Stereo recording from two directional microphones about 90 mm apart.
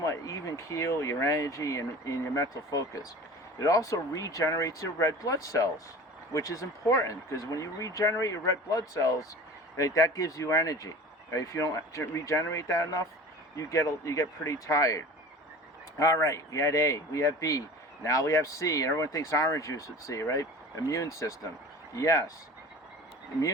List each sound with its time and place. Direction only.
0.0 s speech: 35° left (ahead or behind)